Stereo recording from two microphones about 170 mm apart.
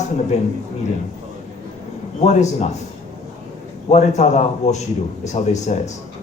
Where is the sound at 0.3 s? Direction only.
40° left (ahead or behind).